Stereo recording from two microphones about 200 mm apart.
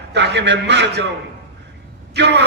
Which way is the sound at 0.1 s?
60° right (ahead or behind).